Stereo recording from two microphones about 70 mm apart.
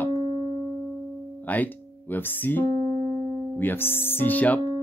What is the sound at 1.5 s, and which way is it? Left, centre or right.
Speech, left.